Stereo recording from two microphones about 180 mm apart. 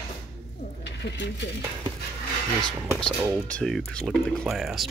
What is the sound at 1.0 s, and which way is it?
Speech, 90° left.